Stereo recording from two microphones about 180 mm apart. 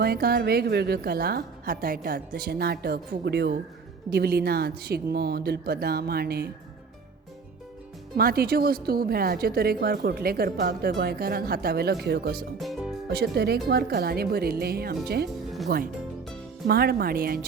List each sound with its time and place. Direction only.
0.0 s a woman's voice: 60° right (ahead or behind)
8.1 s a woman's voice: 55° right (ahead or behind)
12.5 s speech: centre (ahead or behind)
13.1 s a woman's voice: 65° right (ahead or behind)